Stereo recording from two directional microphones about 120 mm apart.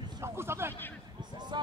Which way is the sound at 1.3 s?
35° right (ahead or behind).